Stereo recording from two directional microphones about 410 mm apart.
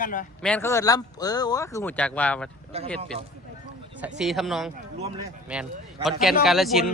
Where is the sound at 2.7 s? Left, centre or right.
Centre.